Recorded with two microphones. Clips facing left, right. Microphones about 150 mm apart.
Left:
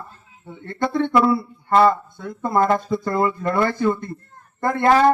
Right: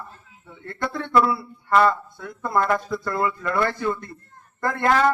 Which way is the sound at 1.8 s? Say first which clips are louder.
Left 3 dB; 25° left (ahead or behind).